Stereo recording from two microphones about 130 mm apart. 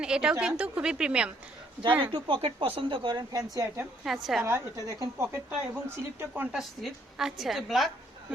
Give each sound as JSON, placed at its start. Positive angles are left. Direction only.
{"t": 0.0, "sound": "a woman's voice", "side_deg": -5}
{"t": 2.1, "sound": "a woman's voice", "side_deg": -40}
{"t": 4.0, "sound": "a woman's voice", "side_deg": 0}
{"t": 4.4, "sound": "a woman's voice", "side_deg": -20}
{"t": 6.5, "sound": "a woman's voice", "side_deg": -5}